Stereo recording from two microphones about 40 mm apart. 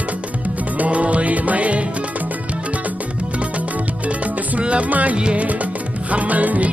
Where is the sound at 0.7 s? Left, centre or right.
Right.